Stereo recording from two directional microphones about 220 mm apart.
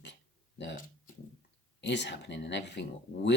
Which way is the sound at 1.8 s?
50° left (ahead or behind).